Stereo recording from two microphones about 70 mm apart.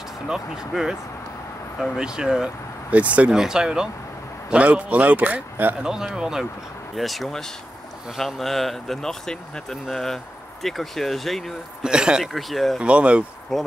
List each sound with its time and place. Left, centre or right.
0.3 s speech: centre
2.0 s speech: centre
2.9 s speech: centre
3.3 s speech: centre; by 5.8 s right
5.8 s speech: centre
11.8 s speech: centre
12.8 s speech: centre
13.5 s speech: centre